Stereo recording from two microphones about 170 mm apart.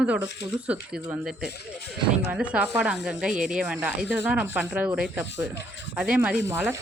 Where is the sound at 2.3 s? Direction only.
5° right (ahead or behind).